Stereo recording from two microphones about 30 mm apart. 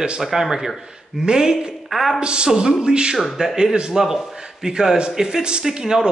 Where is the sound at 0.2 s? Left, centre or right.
Centre.